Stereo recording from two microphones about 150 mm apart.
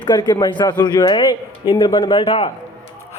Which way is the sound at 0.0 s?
30° left (ahead or behind).